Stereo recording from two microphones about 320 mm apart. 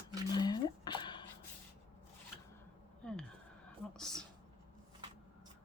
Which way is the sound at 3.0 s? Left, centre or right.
Centre.